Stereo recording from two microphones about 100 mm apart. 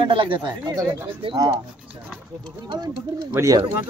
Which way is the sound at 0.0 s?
55° right (ahead or behind).